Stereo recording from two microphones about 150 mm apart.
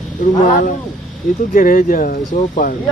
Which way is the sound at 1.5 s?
70° left (ahead or behind).